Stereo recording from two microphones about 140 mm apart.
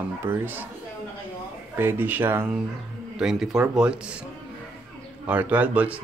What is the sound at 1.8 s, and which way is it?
Speech, 15° right (ahead or behind).